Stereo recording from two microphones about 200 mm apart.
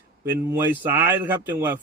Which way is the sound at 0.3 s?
10° right (ahead or behind).